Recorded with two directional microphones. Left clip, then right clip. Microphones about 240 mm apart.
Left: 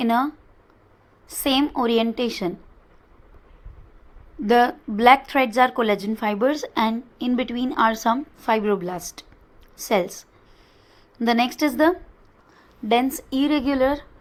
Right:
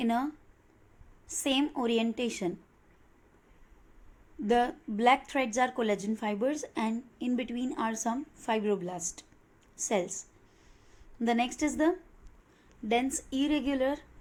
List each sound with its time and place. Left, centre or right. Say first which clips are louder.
0.0 s a woman's voice: left 10 dB; centre
1.3 s a woman's voice: left 8 dB; centre
4.4 s a woman's voice: left 10 dB; centre
11.3 s speech: left 9 dB; centre